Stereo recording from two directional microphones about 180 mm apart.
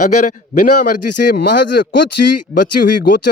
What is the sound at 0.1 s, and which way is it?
Speech, 45° left (ahead or behind).